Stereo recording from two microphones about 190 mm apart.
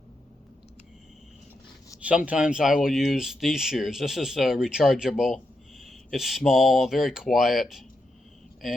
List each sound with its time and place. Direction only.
2.0 s speech: 5° right (ahead or behind)